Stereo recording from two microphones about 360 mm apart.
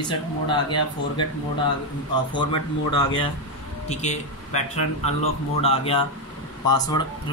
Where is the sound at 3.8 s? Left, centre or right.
Centre.